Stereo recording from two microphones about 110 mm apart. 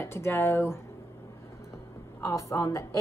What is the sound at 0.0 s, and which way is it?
Speech, 20° left (ahead or behind).